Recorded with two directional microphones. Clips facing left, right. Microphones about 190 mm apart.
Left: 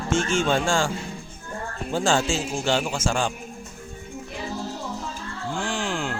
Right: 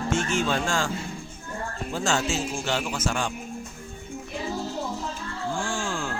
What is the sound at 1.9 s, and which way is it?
Speech, 30° left (ahead or behind).